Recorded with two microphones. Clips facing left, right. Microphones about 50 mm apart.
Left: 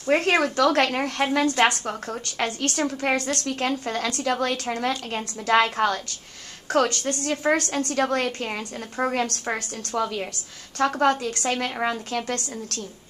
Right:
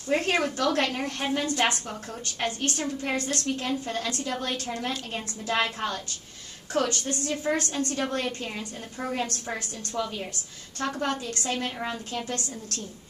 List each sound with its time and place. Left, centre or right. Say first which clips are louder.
0.0 s a woman's voice: left 5 dB; left
6.7 s a woman's voice: left 5 dB; left
9.5 s a woman's voice: left 5 dB; left